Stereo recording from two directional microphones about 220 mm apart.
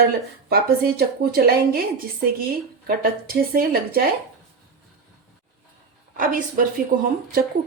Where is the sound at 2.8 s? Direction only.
40° right (ahead or behind).